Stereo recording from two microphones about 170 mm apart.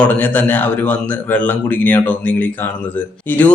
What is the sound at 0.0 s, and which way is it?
A man's voice, 10° left (ahead or behind).